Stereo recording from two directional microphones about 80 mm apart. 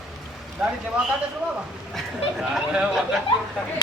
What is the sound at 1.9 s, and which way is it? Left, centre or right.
Speech, centre.